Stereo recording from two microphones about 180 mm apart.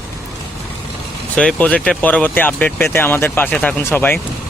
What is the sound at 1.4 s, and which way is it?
Speech, 5° left (ahead or behind).